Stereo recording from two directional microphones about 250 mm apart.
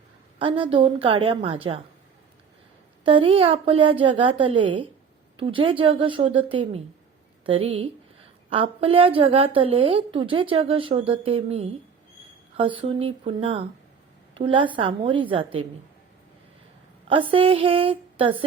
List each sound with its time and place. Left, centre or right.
0.3 s a woman's voice: right
3.0 s a woman's voice: right
17.1 s a woman's voice: right